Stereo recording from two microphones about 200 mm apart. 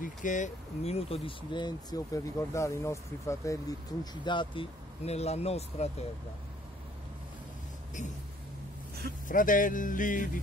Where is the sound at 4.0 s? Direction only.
20° left (ahead or behind).